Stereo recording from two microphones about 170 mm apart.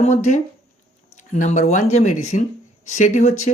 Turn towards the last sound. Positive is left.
turn(degrees=45)  # may be behind; listen again after turning